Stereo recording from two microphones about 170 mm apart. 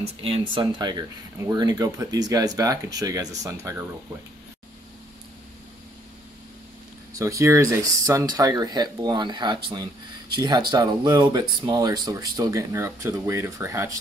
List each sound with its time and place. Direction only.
0.2 s speech: 35° right (ahead or behind)
7.2 s speech: 20° right (ahead or behind)